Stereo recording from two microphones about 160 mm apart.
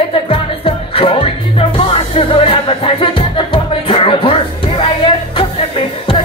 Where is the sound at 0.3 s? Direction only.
35° left (ahead or behind).